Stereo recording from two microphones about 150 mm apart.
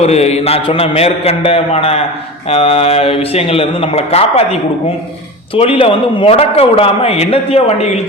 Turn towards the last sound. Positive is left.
turn(degrees=40)  # may be behind; listen again after turning